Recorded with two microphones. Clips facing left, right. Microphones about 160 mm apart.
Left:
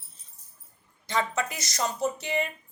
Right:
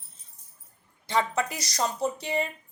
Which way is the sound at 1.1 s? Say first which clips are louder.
Right 2 dB; 30° right (ahead or behind).